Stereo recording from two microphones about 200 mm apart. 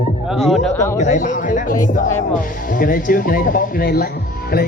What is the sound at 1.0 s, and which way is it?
Speech, 40° left (ahead or behind).